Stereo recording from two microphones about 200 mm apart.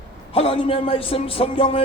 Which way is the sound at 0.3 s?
25° left (ahead or behind).